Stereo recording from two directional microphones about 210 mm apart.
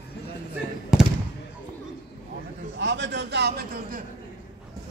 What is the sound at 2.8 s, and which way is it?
A man's voice, 55° right (ahead or behind).